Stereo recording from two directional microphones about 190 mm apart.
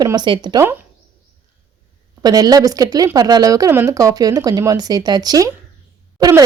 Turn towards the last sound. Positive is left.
turn(degrees=-20)  # may be behind; listen again after turning